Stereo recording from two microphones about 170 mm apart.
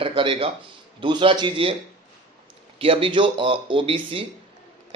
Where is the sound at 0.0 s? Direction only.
30° right (ahead or behind).